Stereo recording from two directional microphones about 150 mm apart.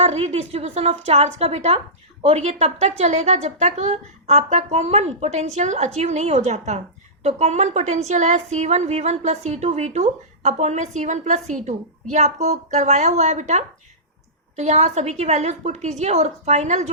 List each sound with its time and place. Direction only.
0.0 s a woman's voice: 45° right (ahead or behind)